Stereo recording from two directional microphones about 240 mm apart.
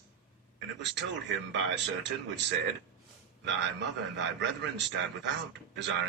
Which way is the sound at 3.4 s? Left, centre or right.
Right.